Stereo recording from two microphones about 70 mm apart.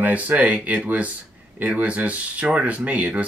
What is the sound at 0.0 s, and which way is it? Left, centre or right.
Speech, right.